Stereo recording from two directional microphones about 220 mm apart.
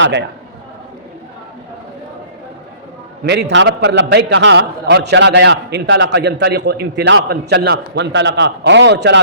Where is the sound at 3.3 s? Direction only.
50° right (ahead or behind).